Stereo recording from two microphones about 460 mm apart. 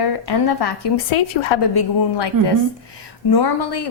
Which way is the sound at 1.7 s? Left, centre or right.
Left.